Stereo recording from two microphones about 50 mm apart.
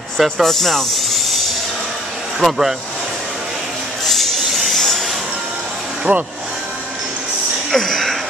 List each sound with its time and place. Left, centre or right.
0.2 s speech: centre
2.4 s speech: centre
4.0 s a sound: centre
4.7 s a sound: centre
6.1 s speech: right
7.7 s speech: centre